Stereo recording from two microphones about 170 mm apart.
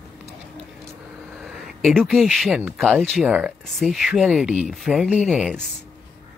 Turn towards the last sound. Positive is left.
turn(degrees=0)  # may be behind; listen again after turning